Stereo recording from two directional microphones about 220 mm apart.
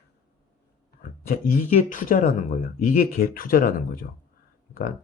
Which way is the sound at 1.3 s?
35° left (ahead or behind).